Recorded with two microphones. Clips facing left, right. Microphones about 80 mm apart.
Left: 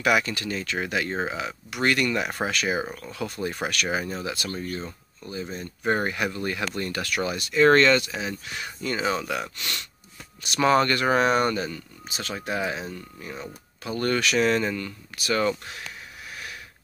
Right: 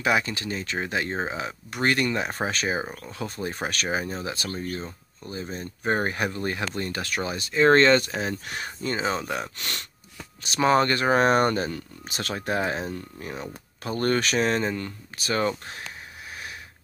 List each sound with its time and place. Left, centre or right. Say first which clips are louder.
0.0 s speech: left 1 dB; right
8.0 s speech: right 2 dB; right
13.8 s speech: right 1 dB; right